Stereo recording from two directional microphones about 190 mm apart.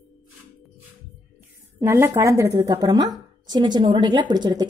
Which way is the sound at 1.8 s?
15° right (ahead or behind).